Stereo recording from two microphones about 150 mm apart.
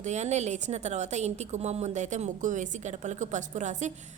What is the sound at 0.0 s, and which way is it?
A woman's voice, 50° right (ahead or behind).